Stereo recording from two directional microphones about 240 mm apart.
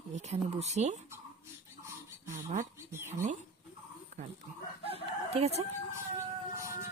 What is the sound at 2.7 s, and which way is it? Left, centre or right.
Speech, centre.